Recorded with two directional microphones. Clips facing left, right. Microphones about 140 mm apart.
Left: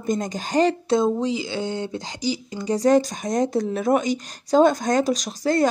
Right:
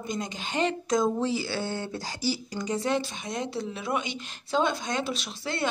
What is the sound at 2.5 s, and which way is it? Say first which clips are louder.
Speech: left 12 dB; 35° left (ahead or behind).